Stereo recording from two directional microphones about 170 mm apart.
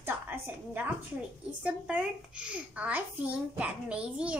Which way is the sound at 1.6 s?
5° right (ahead or behind).